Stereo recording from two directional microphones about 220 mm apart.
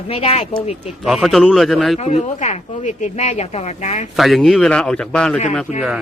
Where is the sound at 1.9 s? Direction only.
30° left (ahead or behind).